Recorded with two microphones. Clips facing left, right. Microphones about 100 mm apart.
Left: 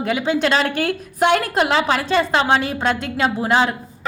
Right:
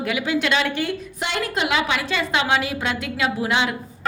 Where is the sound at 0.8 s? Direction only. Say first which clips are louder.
Left 10 dB; 55° left (ahead or behind).